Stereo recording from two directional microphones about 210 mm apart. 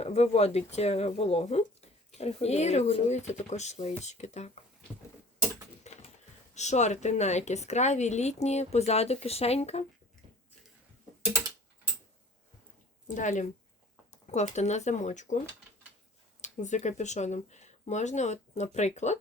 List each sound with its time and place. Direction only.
0.0 s speech: 30° left (ahead or behind)
5.8 s typing: 30° left (ahead or behind)
6.5 s speech: 35° left (ahead or behind)
13.1 s speech: 35° left (ahead or behind)
16.4 s speech: 35° left (ahead or behind)